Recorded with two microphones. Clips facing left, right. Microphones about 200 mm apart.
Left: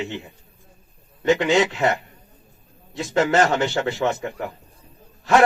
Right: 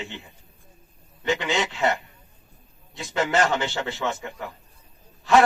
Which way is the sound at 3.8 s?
55° left (ahead or behind).